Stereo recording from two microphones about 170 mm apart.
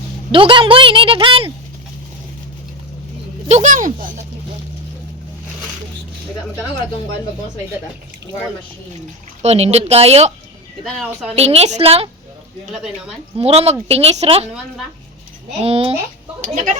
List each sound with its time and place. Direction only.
0.3 s a woman's voice: 30° right (ahead or behind)
3.5 s speech: 50° right (ahead or behind)
9.4 s a woman's voice: 40° right (ahead or behind)
11.0 s speech: 5° right (ahead or behind)
11.3 s a woman's voice: 40° right (ahead or behind)
12.7 s speech: 5° right (ahead or behind)
13.3 s a woman's voice: 35° right (ahead or behind)
15.5 s a woman's voice: 35° right (ahead or behind)
16.4 s speech: 50° right (ahead or behind)